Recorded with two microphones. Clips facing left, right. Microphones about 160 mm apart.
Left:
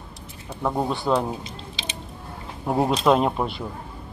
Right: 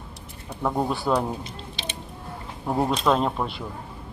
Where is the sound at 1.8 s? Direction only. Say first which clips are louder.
Right 1 dB; 55° right (ahead or behind).